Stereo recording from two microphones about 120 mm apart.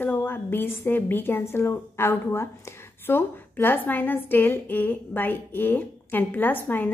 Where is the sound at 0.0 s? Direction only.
15° left (ahead or behind).